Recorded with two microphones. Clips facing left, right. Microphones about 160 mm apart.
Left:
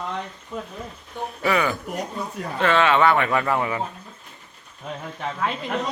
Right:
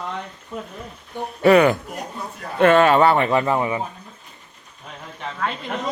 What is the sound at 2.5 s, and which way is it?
Speech, 45° right (ahead or behind).